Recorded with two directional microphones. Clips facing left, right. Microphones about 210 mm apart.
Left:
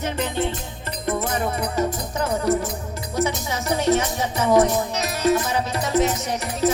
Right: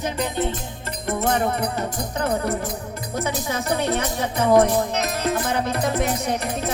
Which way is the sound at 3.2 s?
55° right (ahead or behind).